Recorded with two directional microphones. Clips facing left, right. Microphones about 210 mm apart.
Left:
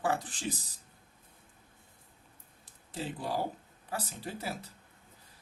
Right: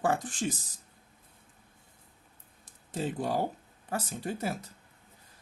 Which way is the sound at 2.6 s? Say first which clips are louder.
Right 5 dB; 45° right (ahead or behind).